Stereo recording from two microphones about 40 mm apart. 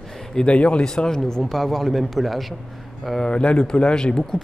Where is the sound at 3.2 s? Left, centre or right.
Left.